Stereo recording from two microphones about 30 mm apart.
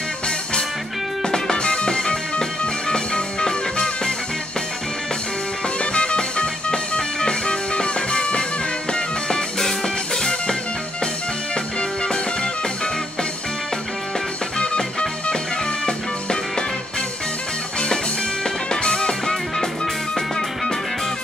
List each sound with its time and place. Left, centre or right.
1.2 s music: left
5.8 s music: left
9.6 s music: centre
11.5 s music: left
18.4 s music: left